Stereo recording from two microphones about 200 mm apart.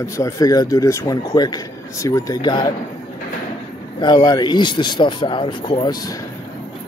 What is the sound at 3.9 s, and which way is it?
Speech, 20° left (ahead or behind).